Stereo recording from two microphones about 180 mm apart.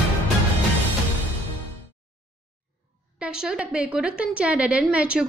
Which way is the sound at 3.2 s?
5° right (ahead or behind).